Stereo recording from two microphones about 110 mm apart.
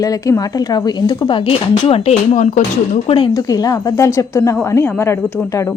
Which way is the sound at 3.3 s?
35° left (ahead or behind).